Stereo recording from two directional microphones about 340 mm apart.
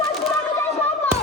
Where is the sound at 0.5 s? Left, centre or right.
Centre.